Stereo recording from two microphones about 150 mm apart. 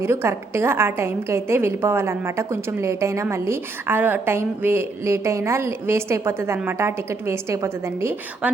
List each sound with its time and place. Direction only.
0.0 s a woman's voice: 15° right (ahead or behind)